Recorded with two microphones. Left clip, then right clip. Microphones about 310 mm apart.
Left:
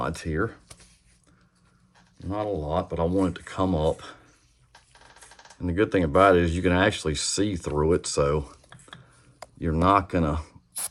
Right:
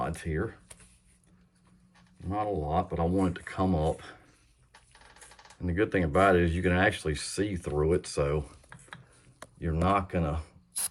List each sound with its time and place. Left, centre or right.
0.0 s speech: centre
2.3 s speech: centre
5.5 s speech: centre
9.6 s speech: centre